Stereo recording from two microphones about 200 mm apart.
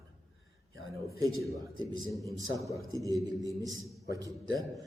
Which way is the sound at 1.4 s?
20° right (ahead or behind).